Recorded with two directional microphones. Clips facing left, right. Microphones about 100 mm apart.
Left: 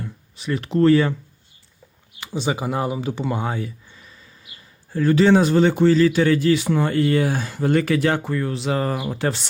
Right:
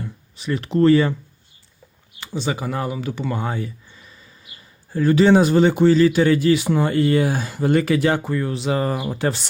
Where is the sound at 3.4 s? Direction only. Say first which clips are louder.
Even; 5° left (ahead or behind).